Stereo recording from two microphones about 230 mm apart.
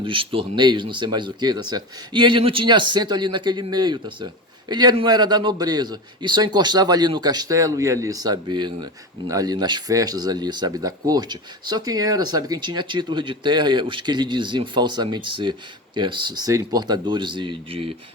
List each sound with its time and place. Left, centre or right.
0.0 s a man's voice: right